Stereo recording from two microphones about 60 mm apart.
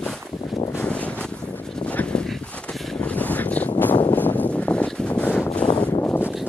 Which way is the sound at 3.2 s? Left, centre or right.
Left.